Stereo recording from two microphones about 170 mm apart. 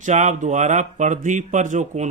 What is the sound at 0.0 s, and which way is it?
Speech, 45° right (ahead or behind).